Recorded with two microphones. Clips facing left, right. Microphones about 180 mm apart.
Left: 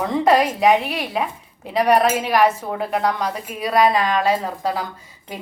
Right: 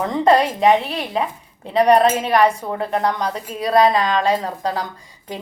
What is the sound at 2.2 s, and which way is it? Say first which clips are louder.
A woman's voice: right 1 dB; 5° left (ahead or behind).